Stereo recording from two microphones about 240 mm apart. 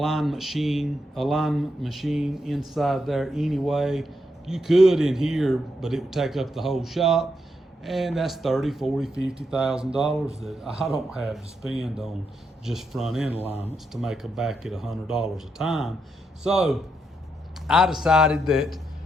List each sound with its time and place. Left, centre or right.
0.0 s speech: centre
13.4 s speech: centre